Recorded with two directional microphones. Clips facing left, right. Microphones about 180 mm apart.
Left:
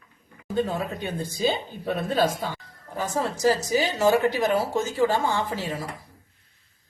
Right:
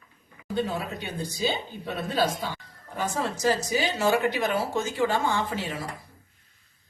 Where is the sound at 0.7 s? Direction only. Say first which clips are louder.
Left 3 dB; 45° left (ahead or behind).